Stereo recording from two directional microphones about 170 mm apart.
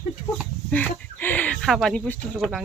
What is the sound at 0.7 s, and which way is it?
Speech, 10° left (ahead or behind).